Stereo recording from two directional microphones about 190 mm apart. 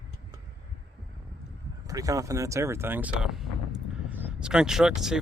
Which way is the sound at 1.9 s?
20° right (ahead or behind).